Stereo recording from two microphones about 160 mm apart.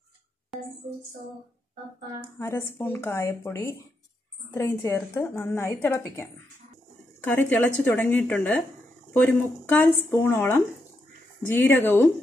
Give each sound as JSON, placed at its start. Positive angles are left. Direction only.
{"t": 0.5, "sound": "music", "side_deg": 0}
{"t": 2.2, "sound": "speech", "side_deg": 15}
{"t": 7.2, "sound": "speech", "side_deg": 10}